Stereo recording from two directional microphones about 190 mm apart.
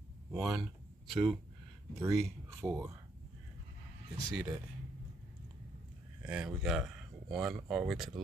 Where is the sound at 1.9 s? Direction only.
15° right (ahead or behind).